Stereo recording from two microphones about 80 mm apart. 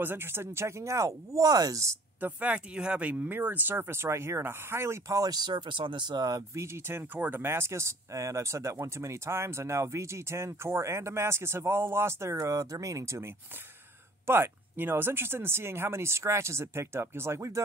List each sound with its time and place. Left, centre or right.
0.0 s speech: right
2.1 s speech: right
6.5 s speech: right